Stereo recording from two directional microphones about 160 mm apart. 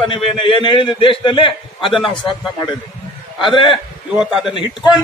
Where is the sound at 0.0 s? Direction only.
35° left (ahead or behind).